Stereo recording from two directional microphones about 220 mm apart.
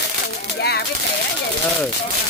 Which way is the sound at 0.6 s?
50° left (ahead or behind).